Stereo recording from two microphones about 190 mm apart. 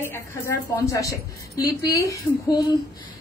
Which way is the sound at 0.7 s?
15° left (ahead or behind).